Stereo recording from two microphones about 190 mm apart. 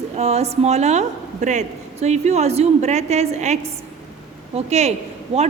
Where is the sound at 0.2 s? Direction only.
35° right (ahead or behind).